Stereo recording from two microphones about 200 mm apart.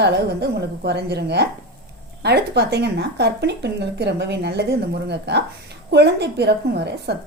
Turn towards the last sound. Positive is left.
turn(degrees=-55)  # may be behind; listen again after turning